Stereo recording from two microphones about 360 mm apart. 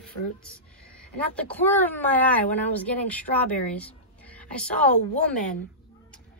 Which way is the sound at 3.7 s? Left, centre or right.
Centre.